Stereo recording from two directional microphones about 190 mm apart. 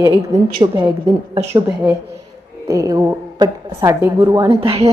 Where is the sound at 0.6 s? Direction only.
25° right (ahead or behind).